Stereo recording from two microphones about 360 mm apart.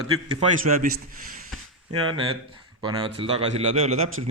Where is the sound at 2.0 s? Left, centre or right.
Centre.